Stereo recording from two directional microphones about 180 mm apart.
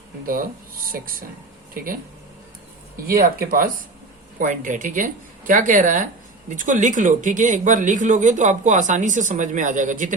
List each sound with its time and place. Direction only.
0.3 s a man's voice: 50° right (ahead or behind)
3.1 s a man's voice: 55° right (ahead or behind)